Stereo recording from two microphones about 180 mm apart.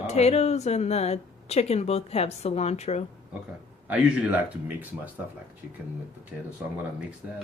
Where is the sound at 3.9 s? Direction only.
5° right (ahead or behind).